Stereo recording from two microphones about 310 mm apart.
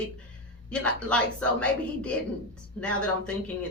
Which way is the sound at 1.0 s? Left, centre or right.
Centre.